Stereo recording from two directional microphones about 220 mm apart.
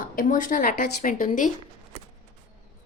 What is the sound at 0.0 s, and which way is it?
Speech, 40° left (ahead or behind).